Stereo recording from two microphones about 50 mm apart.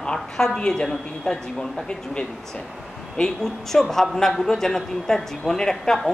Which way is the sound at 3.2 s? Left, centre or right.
Centre.